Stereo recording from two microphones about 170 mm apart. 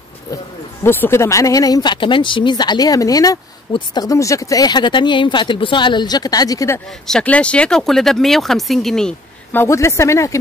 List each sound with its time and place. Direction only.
0.8 s speech: 15° left (ahead or behind)
7.1 s speech: 5° left (ahead or behind)